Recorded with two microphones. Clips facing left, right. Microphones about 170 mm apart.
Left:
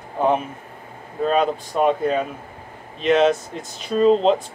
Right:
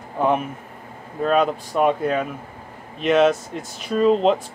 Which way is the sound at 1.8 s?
5° right (ahead or behind).